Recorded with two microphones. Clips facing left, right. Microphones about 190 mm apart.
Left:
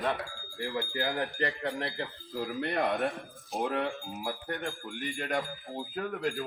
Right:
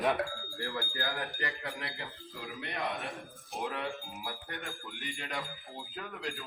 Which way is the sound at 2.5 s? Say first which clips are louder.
Left 7 dB; 45° left (ahead or behind).